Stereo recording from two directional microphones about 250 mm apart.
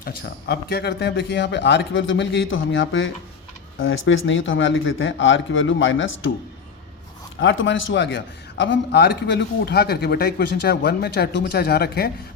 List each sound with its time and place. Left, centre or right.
0.0 s a man's voice: left
7.3 s a man's voice: left